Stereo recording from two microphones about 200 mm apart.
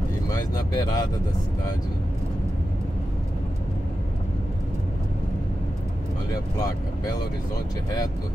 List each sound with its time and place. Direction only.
0.3 s speech: 20° left (ahead or behind)